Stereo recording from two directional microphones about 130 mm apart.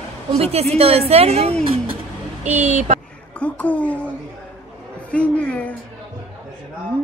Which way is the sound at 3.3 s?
10° left (ahead or behind).